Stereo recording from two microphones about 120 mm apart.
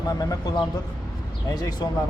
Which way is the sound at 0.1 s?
30° left (ahead or behind).